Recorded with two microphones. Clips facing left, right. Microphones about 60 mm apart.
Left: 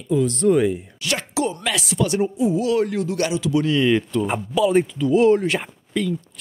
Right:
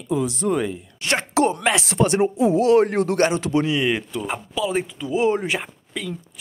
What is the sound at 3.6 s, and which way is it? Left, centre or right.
Speech, centre.